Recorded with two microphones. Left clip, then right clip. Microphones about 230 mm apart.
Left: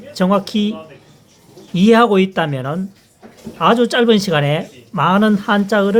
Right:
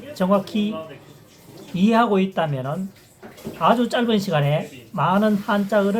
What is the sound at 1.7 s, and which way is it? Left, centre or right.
Speech, left.